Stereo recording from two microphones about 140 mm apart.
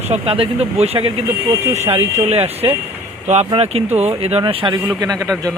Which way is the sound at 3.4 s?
45° right (ahead or behind).